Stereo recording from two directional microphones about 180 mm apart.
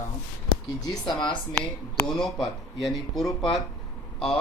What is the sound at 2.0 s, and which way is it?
A man's voice, 5° left (ahead or behind).